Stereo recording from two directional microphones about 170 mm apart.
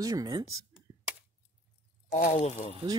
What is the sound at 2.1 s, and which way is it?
Speech, 45° left (ahead or behind).